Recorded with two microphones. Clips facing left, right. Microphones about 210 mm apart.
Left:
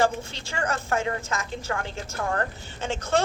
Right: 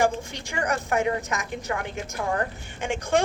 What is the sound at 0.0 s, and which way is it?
A woman's voice, 15° right (ahead or behind).